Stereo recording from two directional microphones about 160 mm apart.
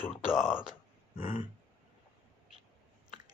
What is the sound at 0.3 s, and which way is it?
Speech, 5° right (ahead or behind).